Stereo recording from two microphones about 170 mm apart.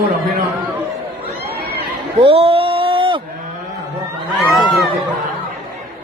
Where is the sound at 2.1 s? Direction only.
35° right (ahead or behind).